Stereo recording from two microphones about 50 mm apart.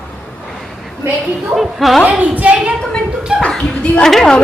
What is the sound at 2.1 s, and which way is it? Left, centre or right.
A woman's voice, right.